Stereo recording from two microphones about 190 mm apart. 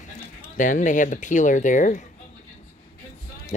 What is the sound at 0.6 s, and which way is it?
Speech, 45° left (ahead or behind).